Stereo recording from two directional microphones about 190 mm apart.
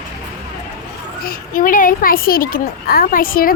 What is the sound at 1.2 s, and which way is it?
A child's voice, 45° left (ahead or behind).